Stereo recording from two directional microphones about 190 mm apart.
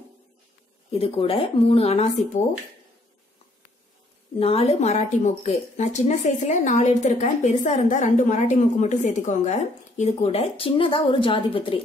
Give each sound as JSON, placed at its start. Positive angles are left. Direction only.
{"t": 0.9, "sound": "speech", "side_deg": 30}
{"t": 4.4, "sound": "speech", "side_deg": 30}